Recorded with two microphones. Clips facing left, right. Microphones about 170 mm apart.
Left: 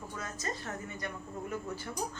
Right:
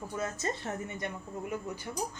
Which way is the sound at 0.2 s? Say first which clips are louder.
Right 5 dB; 25° right (ahead or behind).